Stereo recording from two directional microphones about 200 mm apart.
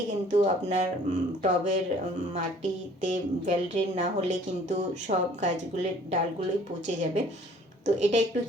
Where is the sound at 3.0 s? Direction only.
40° right (ahead or behind).